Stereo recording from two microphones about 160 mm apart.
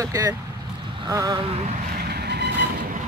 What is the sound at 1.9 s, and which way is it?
Vehicle, 90° right.